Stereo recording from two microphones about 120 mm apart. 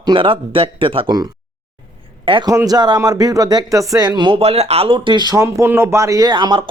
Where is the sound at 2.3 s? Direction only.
40° right (ahead or behind).